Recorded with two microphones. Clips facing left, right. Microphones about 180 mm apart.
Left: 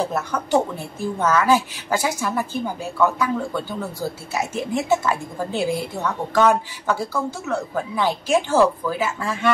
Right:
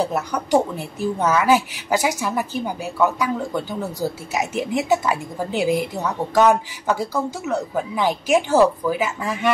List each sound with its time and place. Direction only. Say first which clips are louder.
0.0 s a woman's voice: right 1 dB; 15° right (ahead or behind)